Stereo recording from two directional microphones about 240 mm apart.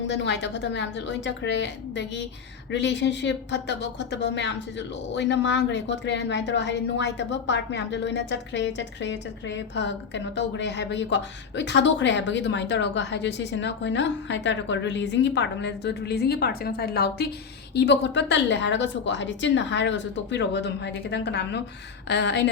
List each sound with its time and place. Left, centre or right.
0.1 s a woman's voice: left